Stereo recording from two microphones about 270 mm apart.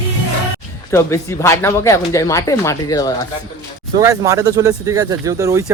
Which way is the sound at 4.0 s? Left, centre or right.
Centre.